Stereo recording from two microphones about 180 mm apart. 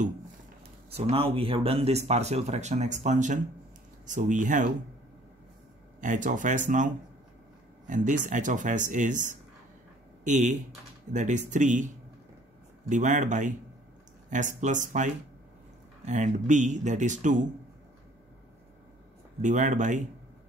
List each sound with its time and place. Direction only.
0.8 s speech: 35° right (ahead or behind)
5.9 s speech: 45° right (ahead or behind)
12.8 s speech: 45° right (ahead or behind)
16.1 s speech: 40° right (ahead or behind)
19.4 s speech: 45° right (ahead or behind)